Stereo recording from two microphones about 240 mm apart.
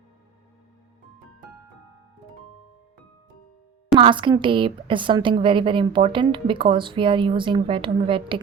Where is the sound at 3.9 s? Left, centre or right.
Right.